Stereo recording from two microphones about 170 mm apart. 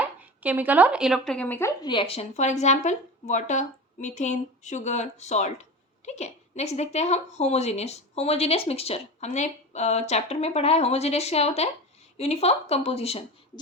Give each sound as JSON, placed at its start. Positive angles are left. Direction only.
{"t": 0.0, "sound": "speech", "side_deg": -10}
{"t": 1.9, "sound": "a woman's voice", "side_deg": 30}